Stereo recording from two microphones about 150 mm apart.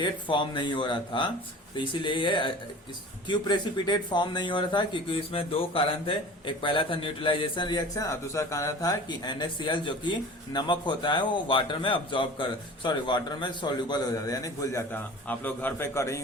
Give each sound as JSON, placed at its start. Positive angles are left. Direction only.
{"t": 0.0, "sound": "speech", "side_deg": 30}